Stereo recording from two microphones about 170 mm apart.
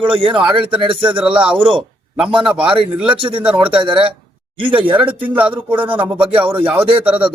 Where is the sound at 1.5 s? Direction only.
30° right (ahead or behind).